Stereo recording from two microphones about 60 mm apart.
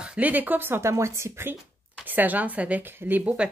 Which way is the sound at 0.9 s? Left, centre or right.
Right.